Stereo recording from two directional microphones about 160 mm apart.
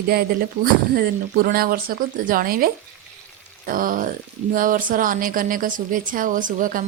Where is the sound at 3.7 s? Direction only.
60° right (ahead or behind).